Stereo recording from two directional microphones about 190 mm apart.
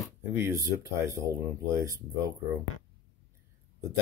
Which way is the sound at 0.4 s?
15° right (ahead or behind).